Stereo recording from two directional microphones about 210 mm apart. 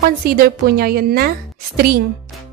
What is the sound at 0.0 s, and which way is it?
A woman's voice, 45° right (ahead or behind).